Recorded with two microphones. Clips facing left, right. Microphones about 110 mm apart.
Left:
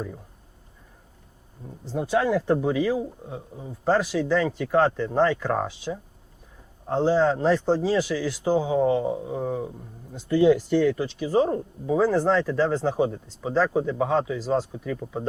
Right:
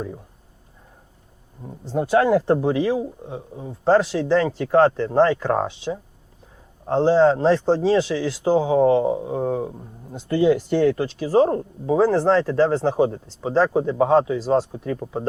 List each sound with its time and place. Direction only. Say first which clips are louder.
1.9 s speech: right 5 dB; 55° right (ahead or behind)
2.6 s speech: right 3 dB; 35° right (ahead or behind)
3.0 s speech: right 3 dB; 20° right (ahead or behind)
3.6 s speech: right 5 dB; 30° right (ahead or behind); by 11.1 s 60° right (ahead or behind)
11.2 s speech: right 5 dB; 45° right (ahead or behind)
12.1 s speech: right 4 dB; 30° right (ahead or behind)